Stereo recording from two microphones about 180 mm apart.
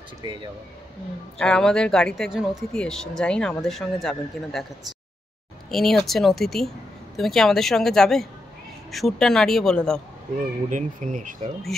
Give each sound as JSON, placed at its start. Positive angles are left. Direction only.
{"t": 0.2, "sound": "speech", "side_deg": -25}
{"t": 1.4, "sound": "speech", "side_deg": 5}
{"t": 5.7, "sound": "speech", "side_deg": 0}
{"t": 10.7, "sound": "speech", "side_deg": -45}